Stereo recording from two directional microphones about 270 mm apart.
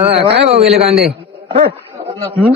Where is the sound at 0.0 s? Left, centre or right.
Right.